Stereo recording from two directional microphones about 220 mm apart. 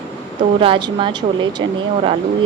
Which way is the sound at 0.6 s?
20° right (ahead or behind).